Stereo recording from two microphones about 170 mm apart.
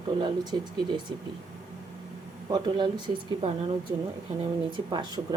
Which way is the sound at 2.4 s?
25° right (ahead or behind).